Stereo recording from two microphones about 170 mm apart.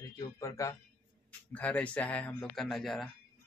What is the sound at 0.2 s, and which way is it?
Speech, 20° left (ahead or behind).